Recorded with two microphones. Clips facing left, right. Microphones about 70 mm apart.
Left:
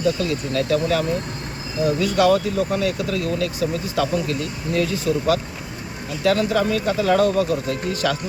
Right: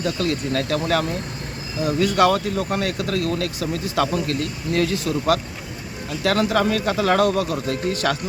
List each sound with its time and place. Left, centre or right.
0.2 s speech: right
8.0 s speech: right